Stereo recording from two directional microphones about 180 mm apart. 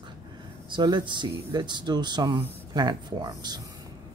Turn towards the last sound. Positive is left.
turn(degrees=-25)  # may be behind; listen again after turning